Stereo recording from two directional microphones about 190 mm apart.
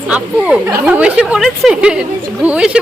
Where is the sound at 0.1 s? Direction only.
5° right (ahead or behind).